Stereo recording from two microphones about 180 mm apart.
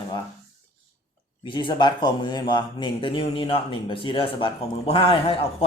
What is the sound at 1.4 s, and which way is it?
Speech, 25° left (ahead or behind).